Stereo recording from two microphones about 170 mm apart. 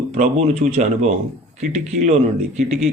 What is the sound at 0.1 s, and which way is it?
Speech, 40° right (ahead or behind).